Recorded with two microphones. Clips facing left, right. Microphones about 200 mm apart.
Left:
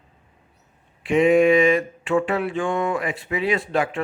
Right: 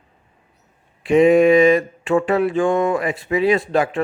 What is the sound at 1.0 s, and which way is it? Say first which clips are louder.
A man's voice: right 4 dB; 40° right (ahead or behind).